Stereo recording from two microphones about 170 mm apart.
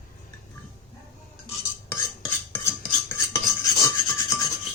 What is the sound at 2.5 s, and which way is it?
Cutlery, 15° left (ahead or behind).